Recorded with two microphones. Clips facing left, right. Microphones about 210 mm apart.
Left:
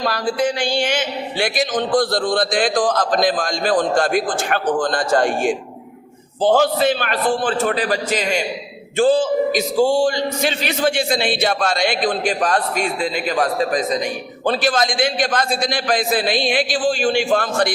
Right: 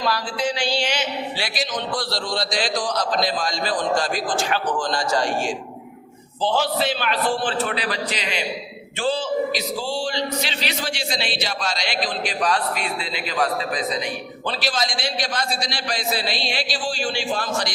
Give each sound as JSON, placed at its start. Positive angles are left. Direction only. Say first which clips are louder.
{"t": 0.0, "sound": "a man's voice", "louder": "left 5 dB", "side_deg": 50}